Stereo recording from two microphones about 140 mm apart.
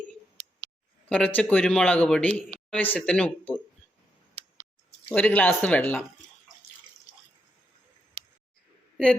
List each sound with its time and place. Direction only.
0.4 s a sound: 50° right (ahead or behind)
1.1 s speech: 10° left (ahead or behind)
5.0 s speech: 10° left (ahead or behind)